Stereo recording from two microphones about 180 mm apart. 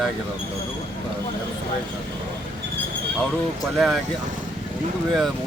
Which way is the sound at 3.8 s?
Centre (ahead or behind).